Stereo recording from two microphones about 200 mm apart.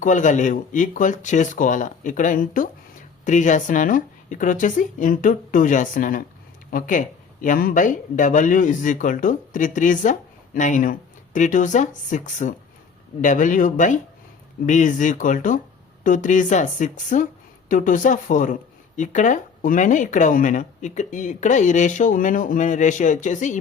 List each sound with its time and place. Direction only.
0.0 s speech: 40° left (ahead or behind)